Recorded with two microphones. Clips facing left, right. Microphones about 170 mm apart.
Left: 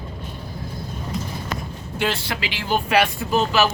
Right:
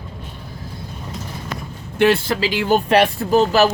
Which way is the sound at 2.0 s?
60° right (ahead or behind).